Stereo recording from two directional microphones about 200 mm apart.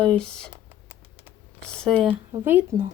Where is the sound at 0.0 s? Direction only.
5° left (ahead or behind).